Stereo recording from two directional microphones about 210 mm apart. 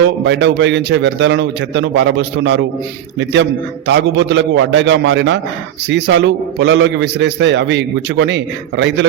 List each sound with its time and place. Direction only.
0.3 s a man's voice: 60° right (ahead or behind)
3.8 s a man's voice: 55° right (ahead or behind)